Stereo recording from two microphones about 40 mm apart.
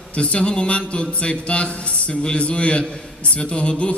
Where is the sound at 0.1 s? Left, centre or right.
Left.